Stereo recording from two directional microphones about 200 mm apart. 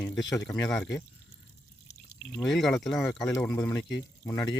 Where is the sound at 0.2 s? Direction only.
20° left (ahead or behind).